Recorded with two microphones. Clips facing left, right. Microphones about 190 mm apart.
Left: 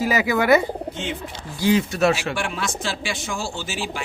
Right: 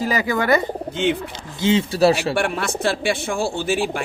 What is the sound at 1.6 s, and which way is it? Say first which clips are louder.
Speech: right 2 dB; 25° right (ahead or behind).